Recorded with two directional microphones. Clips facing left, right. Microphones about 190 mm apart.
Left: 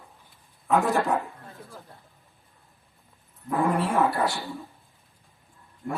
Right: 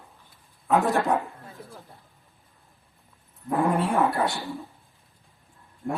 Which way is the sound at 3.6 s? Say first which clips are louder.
Even; centre (ahead or behind).